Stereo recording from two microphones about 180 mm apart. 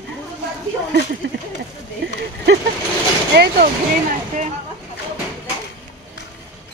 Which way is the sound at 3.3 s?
65° right (ahead or behind).